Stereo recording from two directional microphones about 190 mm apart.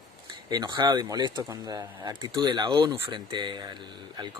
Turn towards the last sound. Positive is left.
turn(degrees=-20)  # may be behind; listen again after turning